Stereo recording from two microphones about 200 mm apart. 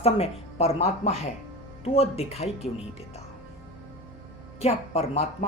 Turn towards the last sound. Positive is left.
turn(degrees=30)  # may be behind; listen again after turning